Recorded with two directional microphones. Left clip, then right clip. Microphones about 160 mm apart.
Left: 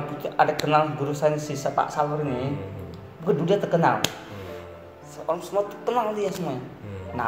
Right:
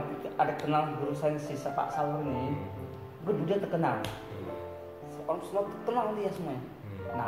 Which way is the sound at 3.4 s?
60° left (ahead or behind).